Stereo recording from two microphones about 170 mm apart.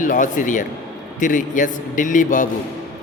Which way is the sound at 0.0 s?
50° left (ahead or behind).